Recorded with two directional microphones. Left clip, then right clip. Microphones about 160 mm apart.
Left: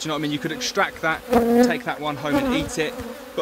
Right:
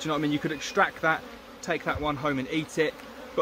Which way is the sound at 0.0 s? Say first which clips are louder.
Left 2 dB; 35° left (ahead or behind).